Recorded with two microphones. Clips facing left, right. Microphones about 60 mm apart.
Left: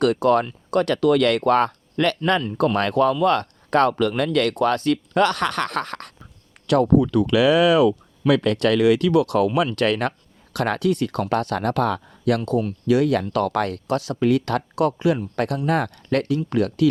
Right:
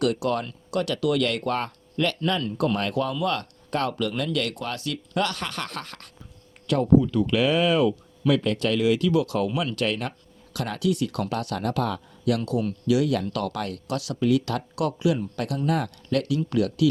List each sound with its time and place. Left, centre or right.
0.0 s speech: left
6.7 s speech: left
8.3 s speech: left
14.2 s speech: left
16.5 s speech: left